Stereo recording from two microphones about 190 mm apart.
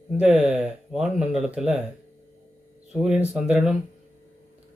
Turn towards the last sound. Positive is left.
turn(degrees=-5)  # may be behind; listen again after turning